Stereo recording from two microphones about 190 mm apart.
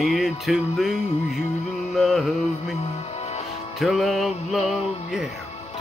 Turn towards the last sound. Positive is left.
turn(degrees=0)  # may be behind; listen again after turning